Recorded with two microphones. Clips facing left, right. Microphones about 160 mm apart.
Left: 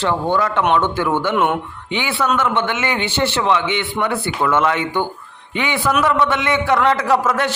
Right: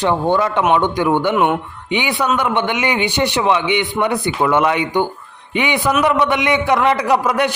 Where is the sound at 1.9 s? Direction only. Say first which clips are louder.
Right 2 dB; 15° right (ahead or behind).